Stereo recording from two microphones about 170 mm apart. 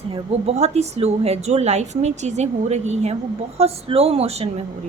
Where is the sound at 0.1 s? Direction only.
40° right (ahead or behind).